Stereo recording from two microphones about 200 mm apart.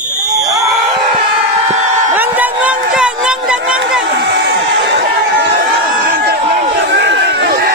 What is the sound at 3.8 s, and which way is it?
Chatter, 60° right (ahead or behind).